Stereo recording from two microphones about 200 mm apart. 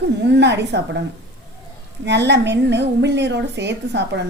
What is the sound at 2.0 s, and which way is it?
A woman's voice, 60° right (ahead or behind).